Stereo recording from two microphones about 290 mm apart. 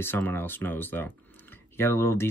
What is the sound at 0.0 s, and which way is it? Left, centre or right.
Speech, centre.